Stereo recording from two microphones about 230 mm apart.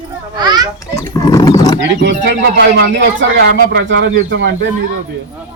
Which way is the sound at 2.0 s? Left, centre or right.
Right.